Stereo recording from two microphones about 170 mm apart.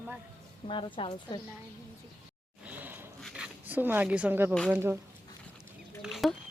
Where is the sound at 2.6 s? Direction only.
10° right (ahead or behind).